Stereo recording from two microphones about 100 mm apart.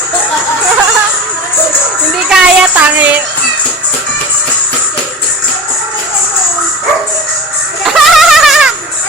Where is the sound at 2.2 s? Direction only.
5° right (ahead or behind).